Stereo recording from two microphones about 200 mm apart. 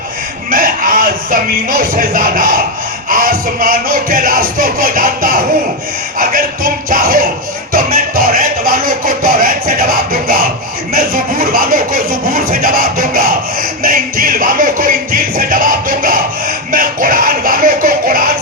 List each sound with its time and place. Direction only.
0.5 s music: 45° right (ahead or behind)
3.1 s speech: 45° right (ahead or behind)
10.9 s a sound: 45° right (ahead or behind)